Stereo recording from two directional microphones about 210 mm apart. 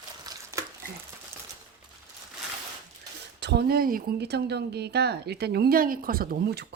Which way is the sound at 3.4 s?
55° right (ahead or behind).